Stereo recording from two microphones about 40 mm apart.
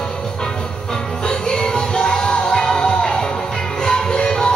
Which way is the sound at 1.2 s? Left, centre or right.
Centre.